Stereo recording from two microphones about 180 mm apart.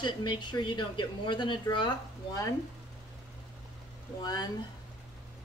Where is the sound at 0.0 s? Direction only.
25° left (ahead or behind).